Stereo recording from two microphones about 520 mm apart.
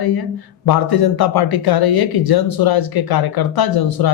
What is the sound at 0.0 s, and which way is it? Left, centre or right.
A man's voice, left.